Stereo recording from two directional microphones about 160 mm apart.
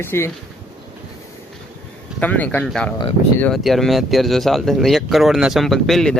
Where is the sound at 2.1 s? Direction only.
10° left (ahead or behind).